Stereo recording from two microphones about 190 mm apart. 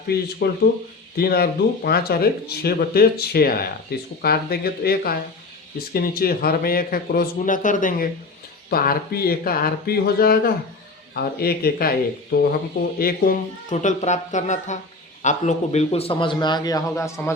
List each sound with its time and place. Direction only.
0.1 s a man's voice: 55° left (ahead or behind); by 17.3 s 15° left (ahead or behind)